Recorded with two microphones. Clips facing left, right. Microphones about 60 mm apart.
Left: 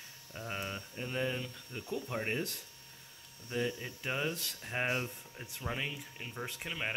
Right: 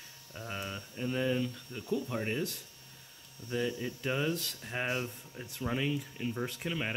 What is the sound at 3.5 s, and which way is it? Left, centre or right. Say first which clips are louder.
Speech: right 2 dB; centre.